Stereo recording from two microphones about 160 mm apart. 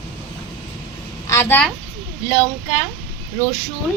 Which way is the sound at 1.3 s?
15° left (ahead or behind).